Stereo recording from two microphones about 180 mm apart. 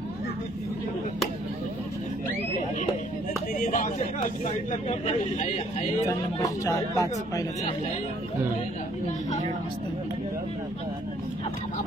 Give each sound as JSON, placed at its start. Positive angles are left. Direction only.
{"t": 3.7, "sound": "speech", "side_deg": 45}
{"t": 4.8, "sound": "speech", "side_deg": 35}
{"t": 6.0, "sound": "speech", "side_deg": 15}